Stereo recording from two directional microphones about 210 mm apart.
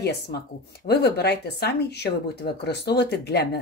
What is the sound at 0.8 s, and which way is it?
Speech, 50° left (ahead or behind).